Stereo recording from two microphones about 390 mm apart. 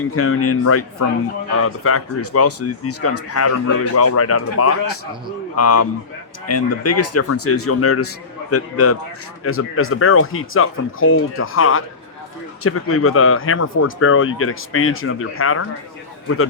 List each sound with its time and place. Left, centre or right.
0.1 s speech: left